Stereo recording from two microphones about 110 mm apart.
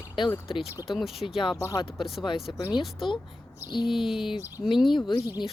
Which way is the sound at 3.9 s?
Centre (ahead or behind).